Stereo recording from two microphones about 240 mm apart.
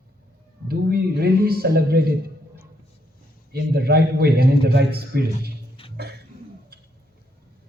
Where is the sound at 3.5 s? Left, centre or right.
Right.